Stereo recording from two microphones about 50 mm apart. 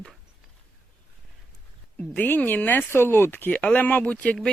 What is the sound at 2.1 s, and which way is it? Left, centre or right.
Speech, left.